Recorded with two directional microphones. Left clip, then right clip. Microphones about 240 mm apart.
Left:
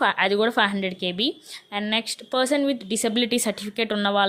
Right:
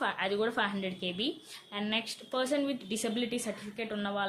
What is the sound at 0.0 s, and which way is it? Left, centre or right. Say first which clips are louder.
A woman's voice: left 11 dB; left.